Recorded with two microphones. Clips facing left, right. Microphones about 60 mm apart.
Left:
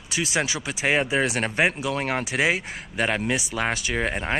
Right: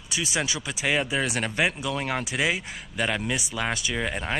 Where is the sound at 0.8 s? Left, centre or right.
Left.